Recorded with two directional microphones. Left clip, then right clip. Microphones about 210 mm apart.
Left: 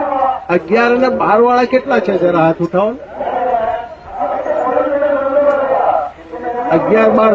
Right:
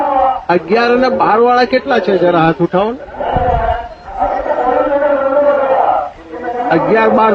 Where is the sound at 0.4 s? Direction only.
10° right (ahead or behind).